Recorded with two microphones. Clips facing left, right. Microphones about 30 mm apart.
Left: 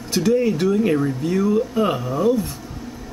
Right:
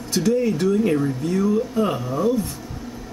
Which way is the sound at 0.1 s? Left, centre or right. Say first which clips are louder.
Left 2 dB; centre.